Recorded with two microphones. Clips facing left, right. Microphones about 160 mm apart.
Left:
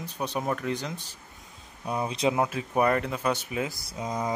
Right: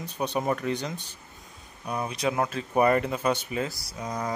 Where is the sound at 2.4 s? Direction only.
10° left (ahead or behind).